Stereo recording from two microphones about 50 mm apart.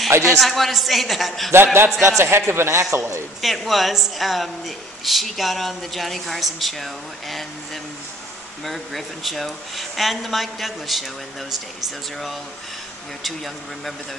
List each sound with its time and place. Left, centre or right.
0.1 s a man's voice: right
0.4 s a woman's voice: centre
1.5 s speech: right
3.3 s a woman's voice: centre
13.2 s a woman's voice: centre